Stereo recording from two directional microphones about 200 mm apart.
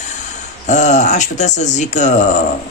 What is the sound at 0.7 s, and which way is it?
Speech, 35° left (ahead or behind).